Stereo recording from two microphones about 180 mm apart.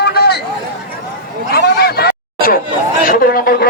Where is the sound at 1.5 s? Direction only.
60° left (ahead or behind).